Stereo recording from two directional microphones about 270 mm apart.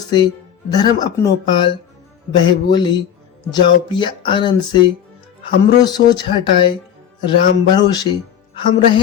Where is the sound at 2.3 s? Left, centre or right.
Centre.